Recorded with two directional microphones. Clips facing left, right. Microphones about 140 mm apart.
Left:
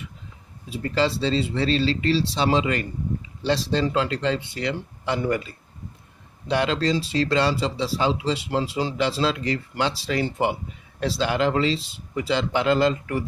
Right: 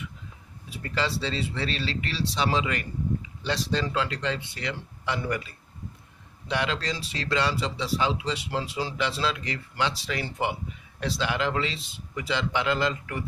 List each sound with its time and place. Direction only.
0.7 s speech: 30° left (ahead or behind)